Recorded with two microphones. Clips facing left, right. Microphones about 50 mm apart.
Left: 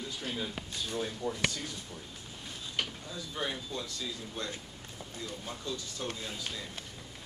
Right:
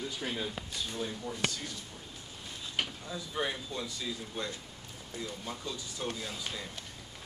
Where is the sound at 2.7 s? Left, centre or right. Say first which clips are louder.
Right 1 dB; centre.